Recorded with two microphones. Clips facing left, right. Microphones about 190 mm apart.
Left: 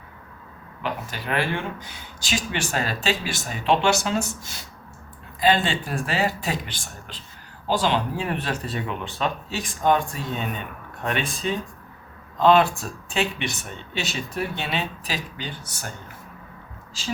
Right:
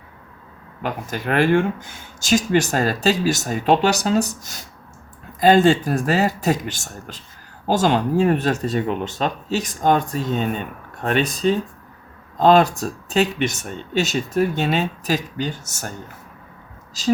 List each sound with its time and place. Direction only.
0.8 s speech: 45° right (ahead or behind)
17.0 s speech: 40° right (ahead or behind)